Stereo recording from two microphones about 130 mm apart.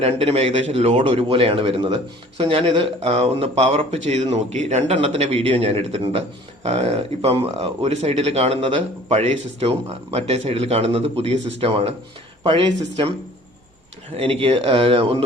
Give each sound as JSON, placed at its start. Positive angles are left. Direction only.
{"t": 0.0, "sound": "speech", "side_deg": -50}
{"t": 14.2, "sound": "speech", "side_deg": -45}